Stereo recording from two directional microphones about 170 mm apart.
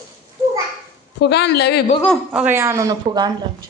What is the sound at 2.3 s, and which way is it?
Speech, 10° right (ahead or behind).